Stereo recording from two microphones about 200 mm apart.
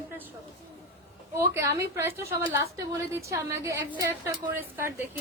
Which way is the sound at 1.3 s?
15° right (ahead or behind).